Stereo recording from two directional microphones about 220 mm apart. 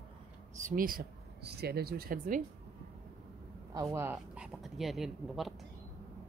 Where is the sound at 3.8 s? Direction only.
10° right (ahead or behind).